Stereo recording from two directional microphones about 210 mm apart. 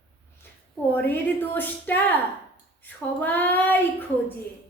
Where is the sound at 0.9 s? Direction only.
10° left (ahead or behind).